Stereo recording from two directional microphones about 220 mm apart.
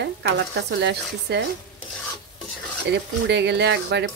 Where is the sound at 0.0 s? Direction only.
55° right (ahead or behind).